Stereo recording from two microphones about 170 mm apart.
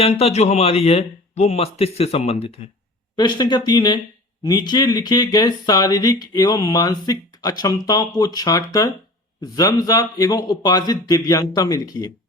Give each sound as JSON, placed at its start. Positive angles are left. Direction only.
{"t": 0.0, "sound": "speech", "side_deg": 35}